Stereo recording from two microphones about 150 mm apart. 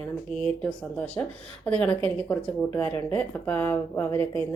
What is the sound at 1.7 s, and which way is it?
A woman's voice, 10° left (ahead or behind).